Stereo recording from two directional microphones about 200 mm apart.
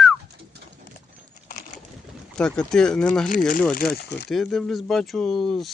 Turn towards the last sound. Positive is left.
turn(degrees=0)  # may be behind; listen again after turning